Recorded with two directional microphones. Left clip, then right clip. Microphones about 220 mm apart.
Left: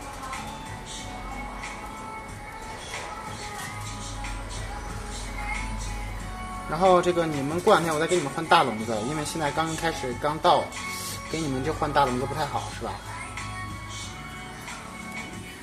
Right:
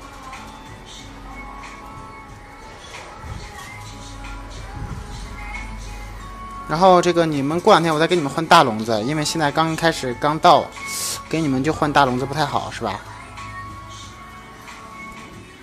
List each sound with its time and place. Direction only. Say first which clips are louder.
6.7 s speech: right 7 dB; 35° right (ahead or behind)
11.6 s speech: right 6 dB; 45° right (ahead or behind)